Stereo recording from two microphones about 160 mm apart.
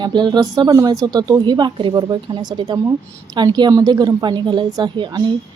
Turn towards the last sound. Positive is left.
turn(degrees=-30)  # may be behind; listen again after turning